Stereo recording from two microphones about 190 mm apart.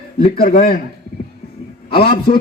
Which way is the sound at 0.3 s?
45° left (ahead or behind).